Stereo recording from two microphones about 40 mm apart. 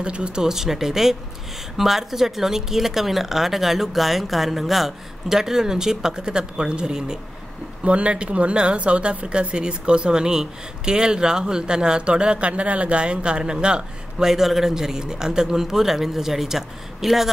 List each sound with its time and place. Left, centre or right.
0.0 s speech: right
0.4 s speech: centre
7.8 s speech: right
14.2 s speech: centre